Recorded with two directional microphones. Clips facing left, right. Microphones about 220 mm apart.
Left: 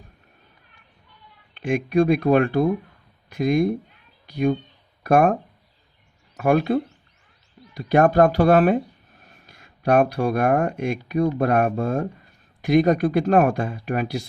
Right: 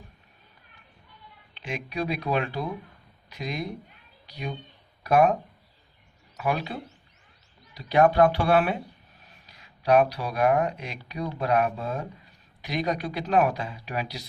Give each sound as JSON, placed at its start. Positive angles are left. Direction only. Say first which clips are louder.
{"t": 1.5, "sound": "speech", "louder": "left 12 dB", "side_deg": 50}